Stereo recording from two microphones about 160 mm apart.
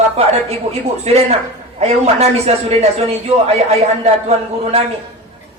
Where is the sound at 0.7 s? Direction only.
40° right (ahead or behind).